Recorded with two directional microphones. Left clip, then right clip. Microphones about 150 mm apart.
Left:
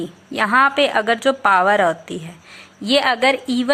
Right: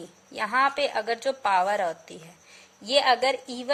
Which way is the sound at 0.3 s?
15° right (ahead or behind).